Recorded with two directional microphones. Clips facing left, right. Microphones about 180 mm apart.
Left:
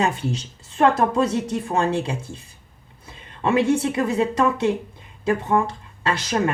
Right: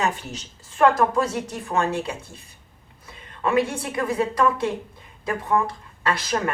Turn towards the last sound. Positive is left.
turn(degrees=25)  # may be behind; listen again after turning